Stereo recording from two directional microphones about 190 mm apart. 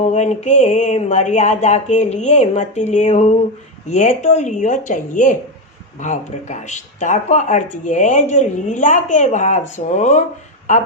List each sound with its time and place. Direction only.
0.0 s speech: 35° left (ahead or behind)